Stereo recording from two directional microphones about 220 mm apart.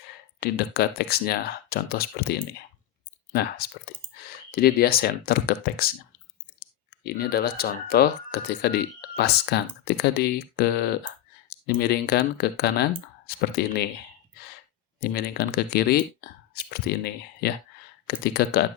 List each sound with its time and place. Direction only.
0.3 s speech: 45° left (ahead or behind)
4.5 s speech: 45° left (ahead or behind)
15.0 s speech: 45° left (ahead or behind)